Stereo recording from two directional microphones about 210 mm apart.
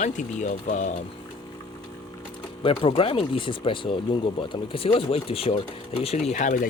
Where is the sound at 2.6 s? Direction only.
25° left (ahead or behind).